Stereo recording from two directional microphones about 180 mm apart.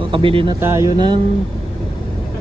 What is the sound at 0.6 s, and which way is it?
Speech, 15° right (ahead or behind).